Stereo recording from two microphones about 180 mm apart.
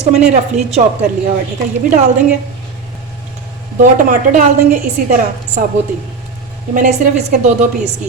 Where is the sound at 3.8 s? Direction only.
45° right (ahead or behind).